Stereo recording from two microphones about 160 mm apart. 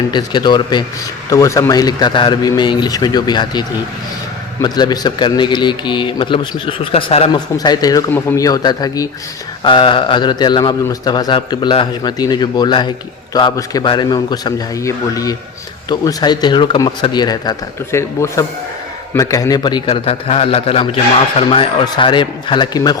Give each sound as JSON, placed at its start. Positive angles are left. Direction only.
{"t": 0.1, "sound": "a man's voice", "side_deg": 30}
{"t": 7.3, "sound": "a man's voice", "side_deg": 25}